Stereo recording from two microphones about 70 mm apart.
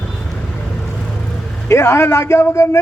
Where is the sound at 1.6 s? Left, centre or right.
Left.